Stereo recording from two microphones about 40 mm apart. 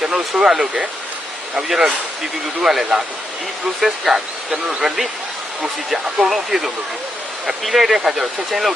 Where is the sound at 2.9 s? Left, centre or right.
Centre.